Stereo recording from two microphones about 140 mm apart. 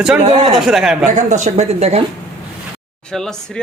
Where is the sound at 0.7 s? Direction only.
5° right (ahead or behind).